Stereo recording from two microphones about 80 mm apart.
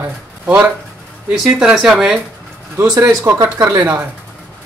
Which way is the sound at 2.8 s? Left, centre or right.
Right.